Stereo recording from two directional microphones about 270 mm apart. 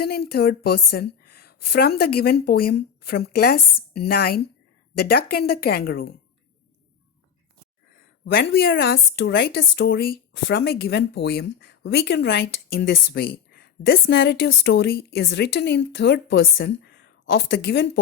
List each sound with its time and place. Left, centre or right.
0.0 s a woman's voice: left
8.2 s speech: left